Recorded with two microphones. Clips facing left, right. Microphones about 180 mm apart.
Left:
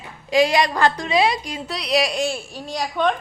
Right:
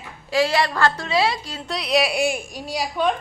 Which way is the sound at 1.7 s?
Centre (ahead or behind).